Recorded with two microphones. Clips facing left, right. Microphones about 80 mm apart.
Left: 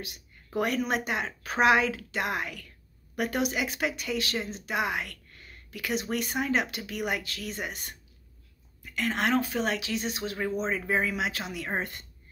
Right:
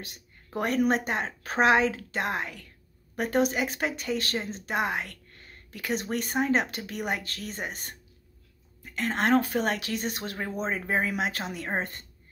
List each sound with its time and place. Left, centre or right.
0.0 s speech: right